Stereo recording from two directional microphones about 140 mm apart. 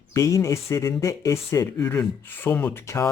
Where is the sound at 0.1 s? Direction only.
25° left (ahead or behind).